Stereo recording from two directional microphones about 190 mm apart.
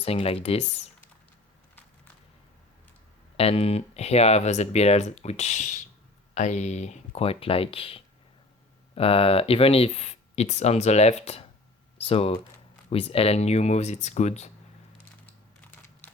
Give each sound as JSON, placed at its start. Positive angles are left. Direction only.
{"t": 0.0, "sound": "speech", "side_deg": 30}
{"t": 3.3, "sound": "speech", "side_deg": 30}